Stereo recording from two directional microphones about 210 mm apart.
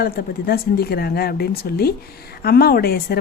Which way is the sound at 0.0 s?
45° left (ahead or behind).